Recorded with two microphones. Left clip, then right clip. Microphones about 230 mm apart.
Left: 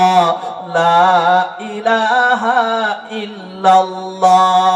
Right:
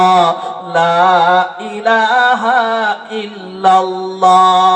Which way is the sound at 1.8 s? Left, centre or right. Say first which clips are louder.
Right 2 dB; right.